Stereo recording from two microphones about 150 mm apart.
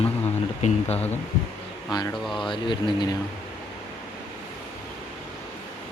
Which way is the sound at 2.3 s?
35° left (ahead or behind).